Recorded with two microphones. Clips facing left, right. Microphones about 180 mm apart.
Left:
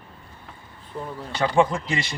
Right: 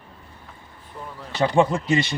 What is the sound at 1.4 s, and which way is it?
Speech, 25° right (ahead or behind).